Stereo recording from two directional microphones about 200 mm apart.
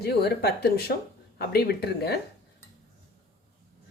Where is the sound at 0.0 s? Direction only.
55° left (ahead or behind).